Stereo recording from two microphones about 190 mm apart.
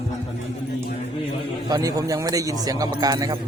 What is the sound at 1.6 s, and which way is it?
Speech, 20° right (ahead or behind).